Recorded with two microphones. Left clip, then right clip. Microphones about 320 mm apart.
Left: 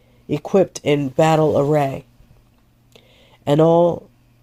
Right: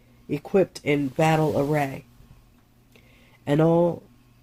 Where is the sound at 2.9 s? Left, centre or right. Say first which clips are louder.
Left 6 dB; left.